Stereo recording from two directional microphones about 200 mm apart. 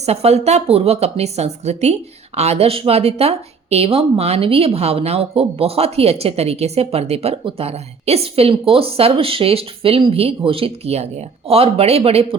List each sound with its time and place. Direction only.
0.0 s speech: 30° right (ahead or behind)